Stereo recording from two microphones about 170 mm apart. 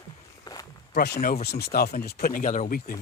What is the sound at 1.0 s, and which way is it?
Speech, 70° left (ahead or behind).